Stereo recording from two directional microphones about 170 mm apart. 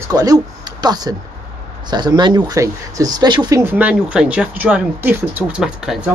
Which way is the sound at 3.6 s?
10° right (ahead or behind).